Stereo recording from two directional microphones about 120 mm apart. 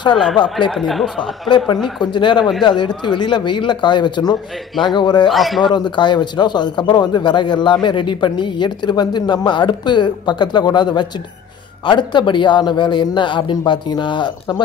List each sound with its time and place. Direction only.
0.1 s speech: 5° left (ahead or behind)
2.0 s speech: 40° left (ahead or behind)
5.3 s speech: centre (ahead or behind)
5.8 s speech: 40° left (ahead or behind)